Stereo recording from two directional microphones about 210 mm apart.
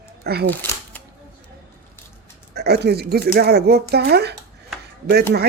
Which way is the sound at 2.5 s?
50° right (ahead or behind).